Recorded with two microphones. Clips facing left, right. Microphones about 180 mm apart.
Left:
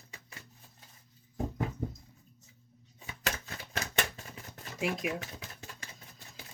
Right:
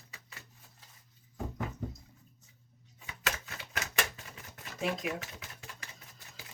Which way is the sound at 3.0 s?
35° left (ahead or behind).